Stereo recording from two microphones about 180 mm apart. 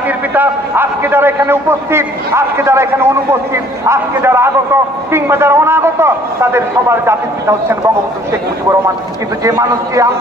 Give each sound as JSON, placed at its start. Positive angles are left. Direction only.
{"t": 0.3, "sound": "a man's voice", "side_deg": -10}
{"t": 9.4, "sound": "a man's voice", "side_deg": -20}